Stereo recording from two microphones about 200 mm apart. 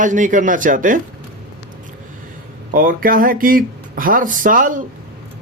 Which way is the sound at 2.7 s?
45° right (ahead or behind).